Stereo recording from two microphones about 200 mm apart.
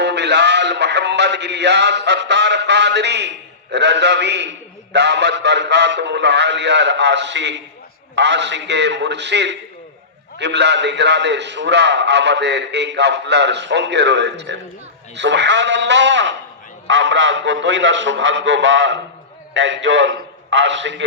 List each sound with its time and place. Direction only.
0.0 s music: 60° right (ahead or behind)
8.1 s a man's voice: 60° right (ahead or behind)